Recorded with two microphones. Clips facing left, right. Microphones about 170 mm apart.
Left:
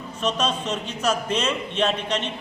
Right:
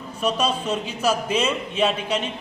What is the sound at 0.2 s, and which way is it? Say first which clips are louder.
A man's voice: right 2 dB; 10° right (ahead or behind).